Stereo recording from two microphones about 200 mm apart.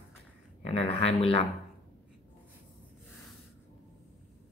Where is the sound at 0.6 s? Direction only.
30° left (ahead or behind).